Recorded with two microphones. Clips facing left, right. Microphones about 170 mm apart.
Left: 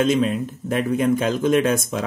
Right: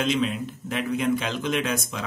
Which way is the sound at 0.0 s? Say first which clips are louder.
Left 6 dB; 45° left (ahead or behind).